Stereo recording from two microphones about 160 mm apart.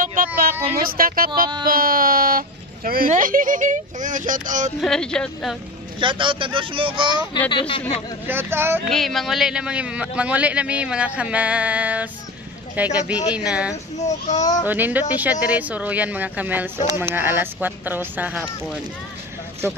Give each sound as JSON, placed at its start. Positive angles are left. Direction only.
{"t": 0.0, "sound": "a sound", "side_deg": -55}
{"t": 0.7, "sound": "speech", "side_deg": -65}
{"t": 4.7, "sound": "speech", "side_deg": 5}
{"t": 5.9, "sound": "speech", "side_deg": -30}
{"t": 7.3, "sound": "speech", "side_deg": 30}
{"t": 8.3, "sound": "a man's voice", "side_deg": -15}
{"t": 8.8, "sound": "a man's voice", "side_deg": 0}
{"t": 13.9, "sound": "speech", "side_deg": 45}
{"t": 14.7, "sound": "a man's voice", "side_deg": -10}